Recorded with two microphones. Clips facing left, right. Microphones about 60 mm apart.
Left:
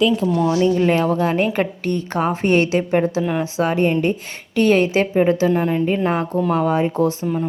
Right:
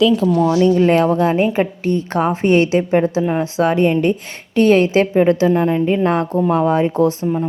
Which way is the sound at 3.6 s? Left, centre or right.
Right.